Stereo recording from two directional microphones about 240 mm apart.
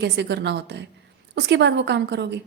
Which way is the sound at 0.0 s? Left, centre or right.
Right.